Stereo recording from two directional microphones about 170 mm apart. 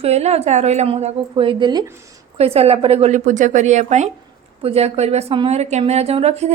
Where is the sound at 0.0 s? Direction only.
40° right (ahead or behind).